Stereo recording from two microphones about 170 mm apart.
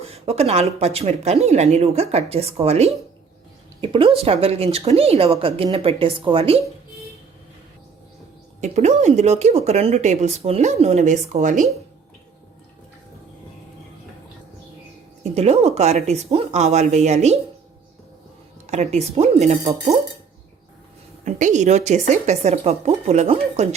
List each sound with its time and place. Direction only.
0.0 s speech: 35° right (ahead or behind)
8.6 s speech: 40° right (ahead or behind)
15.2 s speech: 40° right (ahead or behind)
18.6 s speech: 40° right (ahead or behind)
21.2 s speech: 45° right (ahead or behind)